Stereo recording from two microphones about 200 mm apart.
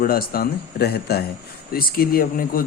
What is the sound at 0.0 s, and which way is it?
A man's voice, 50° left (ahead or behind).